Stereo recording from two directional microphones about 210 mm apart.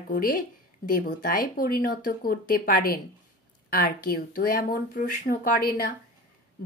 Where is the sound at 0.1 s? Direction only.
40° left (ahead or behind).